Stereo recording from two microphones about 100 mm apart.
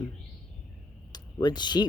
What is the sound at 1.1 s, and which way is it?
Speech, 45° left (ahead or behind).